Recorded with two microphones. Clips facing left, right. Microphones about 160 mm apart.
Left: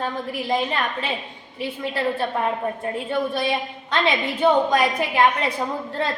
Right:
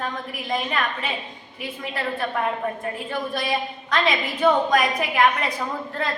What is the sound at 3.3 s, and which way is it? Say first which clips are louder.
A woman's voice: left 2 dB; 25° left (ahead or behind).